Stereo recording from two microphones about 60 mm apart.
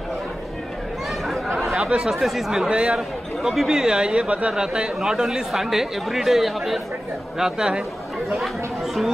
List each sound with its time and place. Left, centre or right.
1.8 s speech: centre
2.7 s speech: centre